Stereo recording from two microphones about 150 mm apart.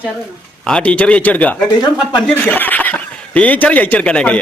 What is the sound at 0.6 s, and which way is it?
Speech, 5° left (ahead or behind).